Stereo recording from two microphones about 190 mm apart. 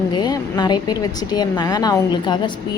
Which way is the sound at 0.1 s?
20° left (ahead or behind).